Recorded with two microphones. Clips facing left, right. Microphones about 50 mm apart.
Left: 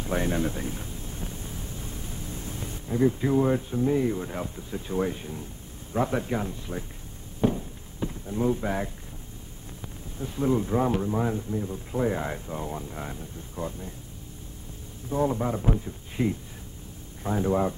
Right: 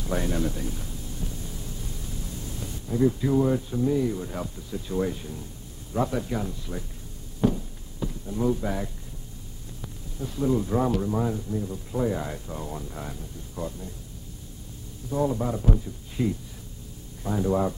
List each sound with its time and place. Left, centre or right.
0.0 s a sound: left
3.2 s speech: left
7.4 s a sound: left
10.1 s speech: left
11.0 s speech: centre
11.2 s speech: left
15.0 s speech: left